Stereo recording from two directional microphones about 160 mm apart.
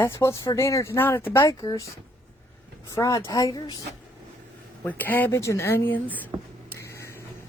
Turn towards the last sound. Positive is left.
turn(degrees=15)  # may be behind; listen again after turning